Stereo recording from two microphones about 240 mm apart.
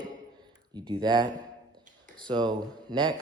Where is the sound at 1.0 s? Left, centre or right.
Centre.